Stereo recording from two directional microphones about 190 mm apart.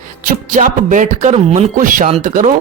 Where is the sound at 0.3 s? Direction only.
40° right (ahead or behind).